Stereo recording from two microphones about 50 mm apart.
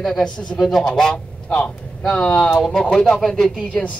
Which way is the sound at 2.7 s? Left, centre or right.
Centre.